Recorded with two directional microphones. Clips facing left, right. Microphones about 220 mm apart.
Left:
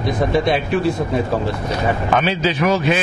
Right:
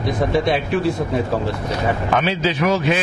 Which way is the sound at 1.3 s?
20° left (ahead or behind).